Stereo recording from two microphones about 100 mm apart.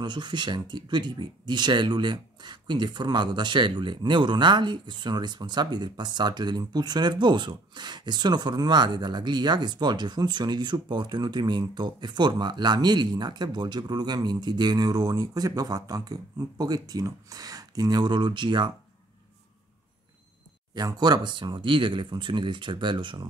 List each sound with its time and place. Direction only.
0.0 s speech: 50° right (ahead or behind)
20.7 s speech: 40° right (ahead or behind)